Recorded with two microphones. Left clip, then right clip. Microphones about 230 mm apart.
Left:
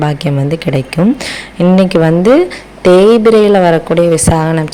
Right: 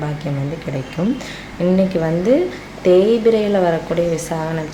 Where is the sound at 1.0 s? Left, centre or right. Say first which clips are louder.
Left 9 dB; left.